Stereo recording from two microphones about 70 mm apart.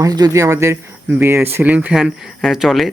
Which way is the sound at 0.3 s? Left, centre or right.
Right.